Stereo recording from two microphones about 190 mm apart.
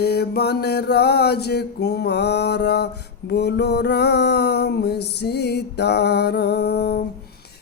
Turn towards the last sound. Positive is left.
turn(degrees=60)  # may be behind; listen again after turning